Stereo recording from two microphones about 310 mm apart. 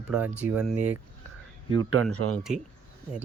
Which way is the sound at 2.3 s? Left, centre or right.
Centre.